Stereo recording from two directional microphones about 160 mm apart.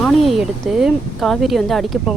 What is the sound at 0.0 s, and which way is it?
Speech, centre (ahead or behind).